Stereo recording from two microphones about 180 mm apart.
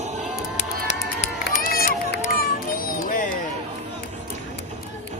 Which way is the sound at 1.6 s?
55° left (ahead or behind).